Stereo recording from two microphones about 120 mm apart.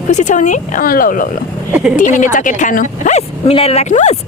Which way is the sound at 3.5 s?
55° left (ahead or behind).